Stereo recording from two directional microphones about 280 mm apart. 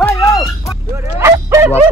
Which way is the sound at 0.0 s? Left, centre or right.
Centre.